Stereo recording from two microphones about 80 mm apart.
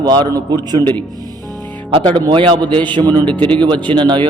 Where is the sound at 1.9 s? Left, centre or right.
Right.